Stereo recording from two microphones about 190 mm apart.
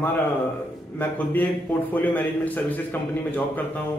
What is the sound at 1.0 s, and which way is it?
A man's voice, 10° left (ahead or behind).